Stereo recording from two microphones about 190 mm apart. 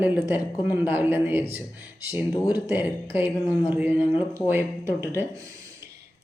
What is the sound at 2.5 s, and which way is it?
A woman's voice, 10° right (ahead or behind).